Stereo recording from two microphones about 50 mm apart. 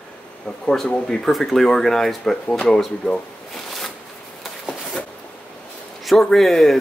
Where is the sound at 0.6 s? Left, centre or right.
Centre.